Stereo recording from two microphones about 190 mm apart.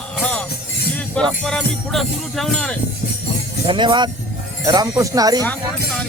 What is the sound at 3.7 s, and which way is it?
Speech, 25° right (ahead or behind).